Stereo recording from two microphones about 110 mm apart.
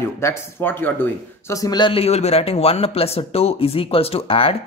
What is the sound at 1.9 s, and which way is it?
Speech, 70° left (ahead or behind).